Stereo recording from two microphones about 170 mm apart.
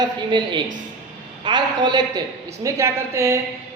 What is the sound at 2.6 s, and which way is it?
Speech, 15° right (ahead or behind).